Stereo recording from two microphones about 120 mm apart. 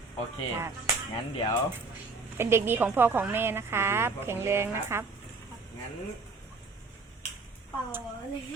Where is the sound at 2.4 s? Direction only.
20° right (ahead or behind).